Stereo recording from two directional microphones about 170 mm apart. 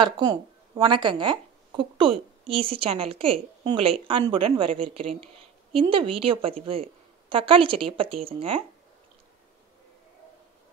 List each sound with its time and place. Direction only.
0.0 s a woman's voice: 25° right (ahead or behind)